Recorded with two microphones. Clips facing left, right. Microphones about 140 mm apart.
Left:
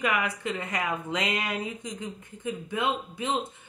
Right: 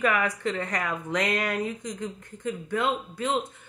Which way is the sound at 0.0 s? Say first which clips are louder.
Right 3 dB; 15° left (ahead or behind).